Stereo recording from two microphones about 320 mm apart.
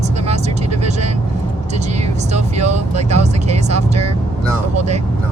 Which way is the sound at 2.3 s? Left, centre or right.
Right.